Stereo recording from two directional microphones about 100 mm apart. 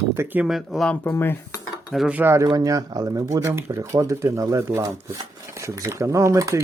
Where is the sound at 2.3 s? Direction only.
35° right (ahead or behind).